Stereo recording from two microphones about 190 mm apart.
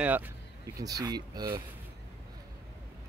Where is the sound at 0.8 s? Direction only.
20° right (ahead or behind).